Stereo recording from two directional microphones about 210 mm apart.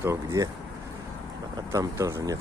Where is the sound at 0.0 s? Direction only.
15° right (ahead or behind).